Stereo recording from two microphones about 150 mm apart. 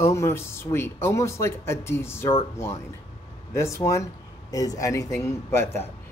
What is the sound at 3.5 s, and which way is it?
Speech, 20° left (ahead or behind).